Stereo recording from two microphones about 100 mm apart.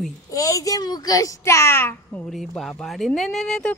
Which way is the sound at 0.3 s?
35° left (ahead or behind).